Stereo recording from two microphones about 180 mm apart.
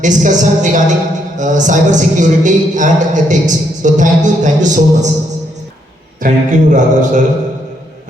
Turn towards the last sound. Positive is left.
turn(degrees=-45)  # may be behind; listen again after turning